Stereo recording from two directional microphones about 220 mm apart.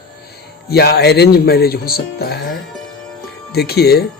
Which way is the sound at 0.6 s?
45° left (ahead or behind).